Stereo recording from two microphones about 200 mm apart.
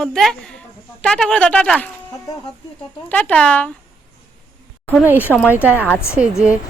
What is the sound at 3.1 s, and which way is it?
Speech, 5° left (ahead or behind).